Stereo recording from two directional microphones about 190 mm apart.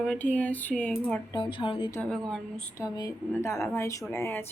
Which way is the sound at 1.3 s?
25° left (ahead or behind).